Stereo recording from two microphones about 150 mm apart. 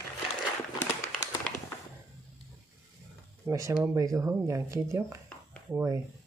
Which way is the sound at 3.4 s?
20° right (ahead or behind).